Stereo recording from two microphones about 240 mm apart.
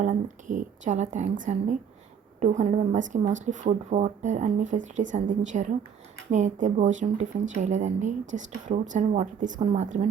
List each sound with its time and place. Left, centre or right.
0.0 s a woman's voice: right